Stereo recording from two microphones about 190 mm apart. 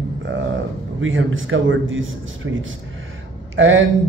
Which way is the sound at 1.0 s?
90° right.